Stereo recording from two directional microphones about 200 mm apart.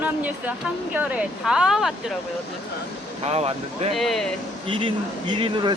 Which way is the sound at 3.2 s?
30° right (ahead or behind).